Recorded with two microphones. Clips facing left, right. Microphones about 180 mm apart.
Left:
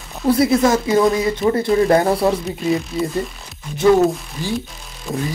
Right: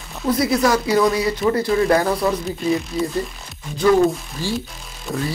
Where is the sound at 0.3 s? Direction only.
25° left (ahead or behind).